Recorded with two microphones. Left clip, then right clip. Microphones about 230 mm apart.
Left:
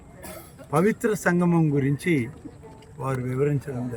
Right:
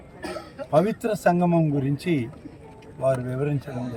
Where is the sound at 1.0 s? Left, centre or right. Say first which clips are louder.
Right 2 dB; centre.